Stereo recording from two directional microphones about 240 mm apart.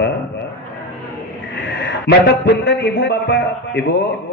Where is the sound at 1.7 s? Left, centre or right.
Left.